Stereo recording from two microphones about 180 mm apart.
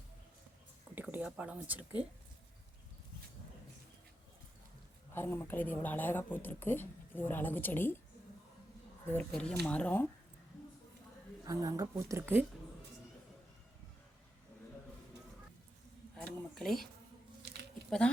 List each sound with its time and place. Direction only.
0.9 s speech: 10° right (ahead or behind)
5.1 s speech: 15° left (ahead or behind)
9.1 s speech: 5° left (ahead or behind)
11.4 s speech: 20° right (ahead or behind)
16.1 s a sound: centre (ahead or behind)
17.8 s speech: 5° left (ahead or behind)